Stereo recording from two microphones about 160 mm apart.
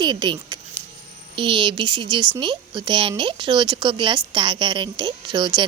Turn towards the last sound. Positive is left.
turn(degrees=-30)  # may be behind; listen again after turning